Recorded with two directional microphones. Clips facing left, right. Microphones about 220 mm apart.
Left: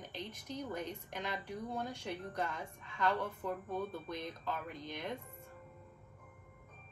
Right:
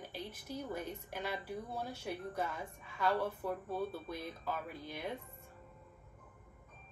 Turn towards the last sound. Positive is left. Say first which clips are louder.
# even
turn(degrees=-10)  # may be behind; listen again after turning